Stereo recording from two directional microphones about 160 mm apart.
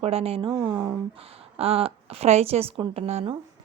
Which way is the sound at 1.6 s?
40° right (ahead or behind).